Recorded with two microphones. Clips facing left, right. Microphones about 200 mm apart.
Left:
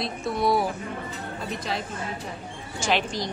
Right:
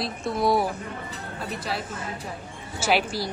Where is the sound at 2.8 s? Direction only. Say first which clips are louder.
Right 2 dB; 5° right (ahead or behind).